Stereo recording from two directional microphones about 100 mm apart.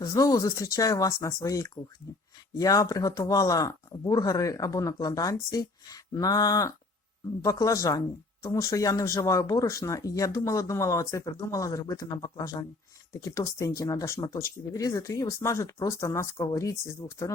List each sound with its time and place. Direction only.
0.1 s speech: 35° left (ahead or behind)